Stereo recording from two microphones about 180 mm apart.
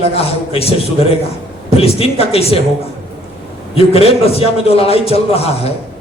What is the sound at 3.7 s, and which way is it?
A man's voice, 35° left (ahead or behind).